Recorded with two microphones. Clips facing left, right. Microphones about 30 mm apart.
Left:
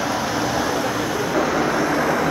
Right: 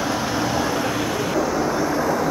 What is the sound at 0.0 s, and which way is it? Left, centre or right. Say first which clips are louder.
Vehicle: left 1 dB; centre.